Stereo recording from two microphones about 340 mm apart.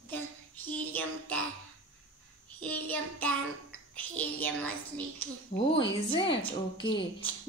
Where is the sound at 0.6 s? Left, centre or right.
Centre.